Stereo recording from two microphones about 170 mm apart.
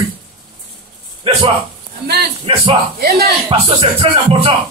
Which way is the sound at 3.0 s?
65° right (ahead or behind).